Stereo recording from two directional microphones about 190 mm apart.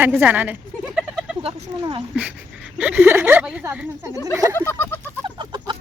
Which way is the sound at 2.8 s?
5° right (ahead or behind).